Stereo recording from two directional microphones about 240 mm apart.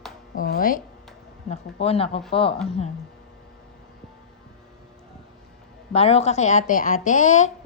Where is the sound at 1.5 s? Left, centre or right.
Left.